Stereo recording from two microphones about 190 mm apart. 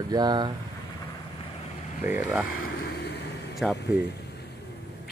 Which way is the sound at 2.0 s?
10° right (ahead or behind).